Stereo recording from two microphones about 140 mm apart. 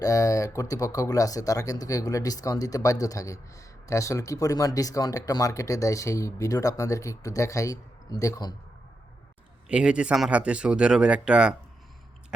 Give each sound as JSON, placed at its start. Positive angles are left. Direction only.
{"t": 0.0, "sound": "speech", "side_deg": 25}
{"t": 9.6, "sound": "speech", "side_deg": -10}